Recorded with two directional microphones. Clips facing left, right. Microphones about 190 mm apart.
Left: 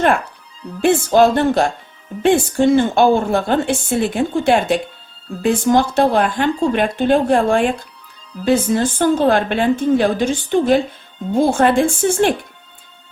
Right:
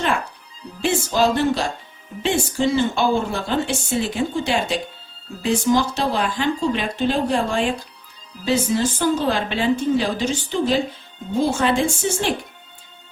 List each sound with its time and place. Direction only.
0.8 s a woman's voice: 55° left (ahead or behind)